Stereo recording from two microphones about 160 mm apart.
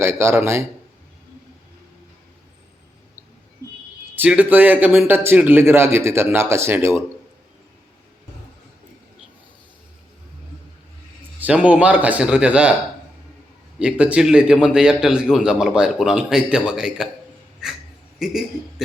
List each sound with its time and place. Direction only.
0.0 s speech: 15° right (ahead or behind)
4.1 s speech: 10° right (ahead or behind)
11.3 s speech: 10° right (ahead or behind)
13.7 s a man's voice: 5° right (ahead or behind)
17.6 s a sound: 5° right (ahead or behind)
18.2 s a man's voice: centre (ahead or behind)